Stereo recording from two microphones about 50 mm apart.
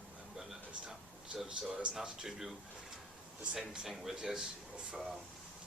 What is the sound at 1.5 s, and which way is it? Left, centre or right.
Speech, centre.